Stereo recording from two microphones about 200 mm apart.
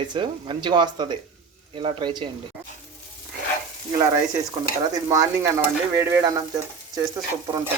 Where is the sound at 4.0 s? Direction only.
15° right (ahead or behind).